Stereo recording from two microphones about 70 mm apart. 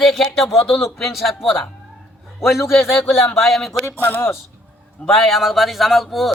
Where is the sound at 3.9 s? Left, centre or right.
Right.